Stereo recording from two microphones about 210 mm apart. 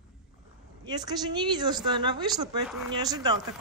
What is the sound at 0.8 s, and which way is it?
A woman's voice, 20° right (ahead or behind).